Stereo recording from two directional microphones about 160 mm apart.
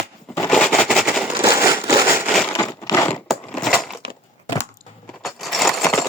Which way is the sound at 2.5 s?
20° left (ahead or behind).